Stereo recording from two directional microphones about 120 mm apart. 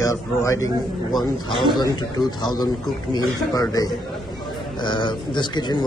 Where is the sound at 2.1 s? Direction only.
35° left (ahead or behind).